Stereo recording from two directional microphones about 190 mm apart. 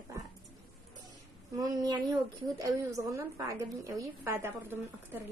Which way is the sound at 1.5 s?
20° right (ahead or behind).